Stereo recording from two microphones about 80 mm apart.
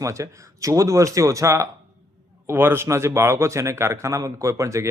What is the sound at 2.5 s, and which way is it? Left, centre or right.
Speech, right.